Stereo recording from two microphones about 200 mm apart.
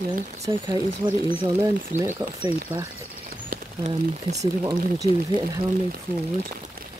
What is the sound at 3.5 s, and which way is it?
Speech, 35° right (ahead or behind).